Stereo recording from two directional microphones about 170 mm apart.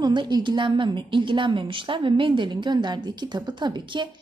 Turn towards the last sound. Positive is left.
turn(degrees=-30)  # may be behind; listen again after turning